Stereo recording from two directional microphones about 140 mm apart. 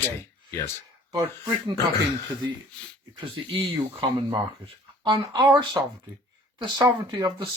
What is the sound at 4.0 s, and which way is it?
Speech, 30° right (ahead or behind).